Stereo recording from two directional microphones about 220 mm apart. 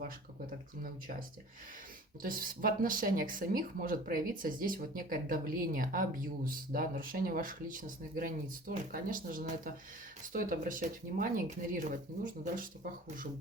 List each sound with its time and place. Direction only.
2.2 s speech: 40° right (ahead or behind)